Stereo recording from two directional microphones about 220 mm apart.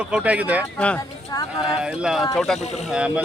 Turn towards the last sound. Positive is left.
turn(degrees=-5)  # may be behind; listen again after turning